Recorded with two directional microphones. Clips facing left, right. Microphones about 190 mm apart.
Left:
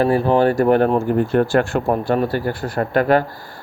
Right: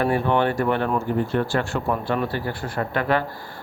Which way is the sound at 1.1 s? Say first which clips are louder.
Left 6 dB; 50° left (ahead or behind).